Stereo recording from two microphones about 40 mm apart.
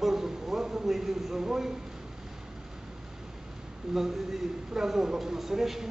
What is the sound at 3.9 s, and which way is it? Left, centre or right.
Speech, centre.